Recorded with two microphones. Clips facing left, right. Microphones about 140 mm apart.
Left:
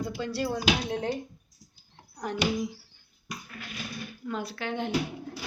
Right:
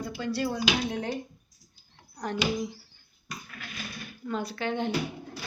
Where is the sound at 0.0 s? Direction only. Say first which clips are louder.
Even; 30° left (ahead or behind).